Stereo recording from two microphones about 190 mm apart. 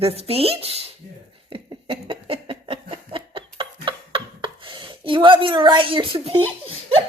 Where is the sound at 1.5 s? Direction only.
25° right (ahead or behind).